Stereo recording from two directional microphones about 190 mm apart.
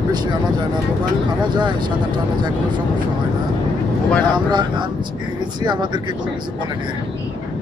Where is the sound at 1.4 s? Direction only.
25° right (ahead or behind).